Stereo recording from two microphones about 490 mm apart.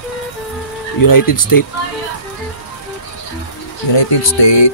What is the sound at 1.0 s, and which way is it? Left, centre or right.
Speech, left.